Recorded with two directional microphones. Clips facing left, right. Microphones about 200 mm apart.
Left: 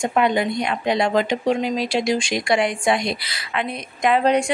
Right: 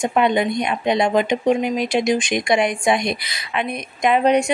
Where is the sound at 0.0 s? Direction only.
20° right (ahead or behind).